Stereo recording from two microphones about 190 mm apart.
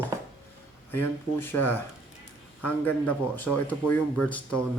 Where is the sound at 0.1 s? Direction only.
15° right (ahead or behind).